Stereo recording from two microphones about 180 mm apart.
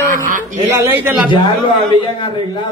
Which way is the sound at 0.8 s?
10° right (ahead or behind).